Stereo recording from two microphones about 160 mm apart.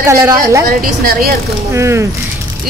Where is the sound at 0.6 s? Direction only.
65° right (ahead or behind).